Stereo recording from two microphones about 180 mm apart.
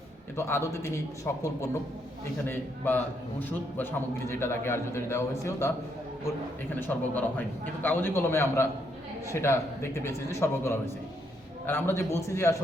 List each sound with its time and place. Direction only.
0.3 s a man's voice: 15° left (ahead or behind)
6.7 s a man's voice: 10° left (ahead or behind)